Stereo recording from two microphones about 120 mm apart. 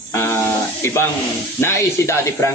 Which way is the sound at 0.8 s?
20° left (ahead or behind).